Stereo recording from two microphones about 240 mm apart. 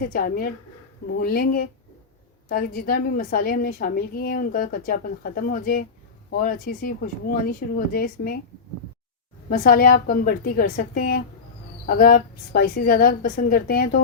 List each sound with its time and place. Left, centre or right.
0.0 s a woman's voice: left
9.5 s a woman's voice: left